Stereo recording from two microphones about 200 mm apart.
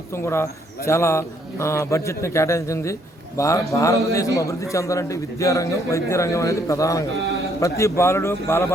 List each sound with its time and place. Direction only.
0.1 s a man's voice: 10° left (ahead or behind)